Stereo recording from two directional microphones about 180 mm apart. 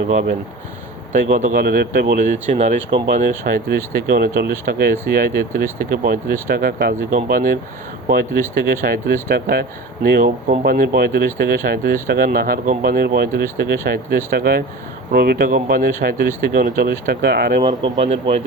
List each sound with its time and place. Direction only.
1.3 s speech: 50° right (ahead or behind)
17.6 s speech: 25° right (ahead or behind)